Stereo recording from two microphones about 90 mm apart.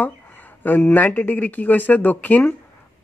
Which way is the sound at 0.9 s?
20° left (ahead or behind).